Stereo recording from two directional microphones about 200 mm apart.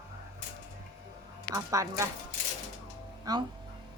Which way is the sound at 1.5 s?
15° right (ahead or behind).